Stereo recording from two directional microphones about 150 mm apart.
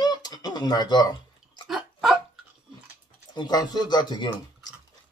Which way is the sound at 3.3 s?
30° left (ahead or behind).